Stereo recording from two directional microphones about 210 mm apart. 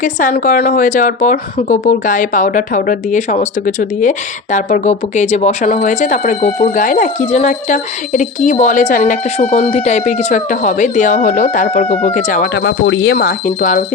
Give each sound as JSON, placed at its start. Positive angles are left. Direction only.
{"t": 0.0, "sound": "speech", "side_deg": 40}
{"t": 13.1, "sound": "speech", "side_deg": 40}